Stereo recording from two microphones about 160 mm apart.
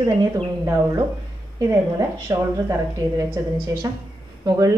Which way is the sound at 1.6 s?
20° right (ahead or behind).